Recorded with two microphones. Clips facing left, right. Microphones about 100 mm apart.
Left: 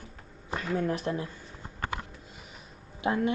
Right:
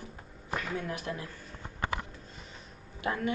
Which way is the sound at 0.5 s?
35° left (ahead or behind).